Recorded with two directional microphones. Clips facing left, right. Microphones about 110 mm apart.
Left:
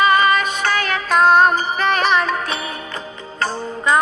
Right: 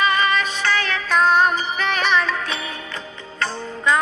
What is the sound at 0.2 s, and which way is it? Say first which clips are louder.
Music: left 4 dB; 45° left (ahead or behind).